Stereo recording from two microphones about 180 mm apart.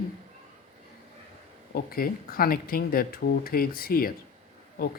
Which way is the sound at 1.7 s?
55° left (ahead or behind).